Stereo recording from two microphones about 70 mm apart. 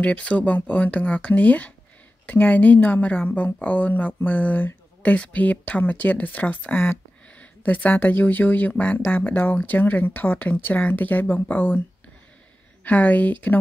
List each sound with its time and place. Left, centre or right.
0.0 s speech: centre
12.8 s speech: left